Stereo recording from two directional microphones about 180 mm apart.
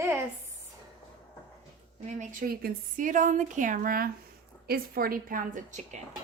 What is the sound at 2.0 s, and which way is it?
A woman's voice, 40° right (ahead or behind).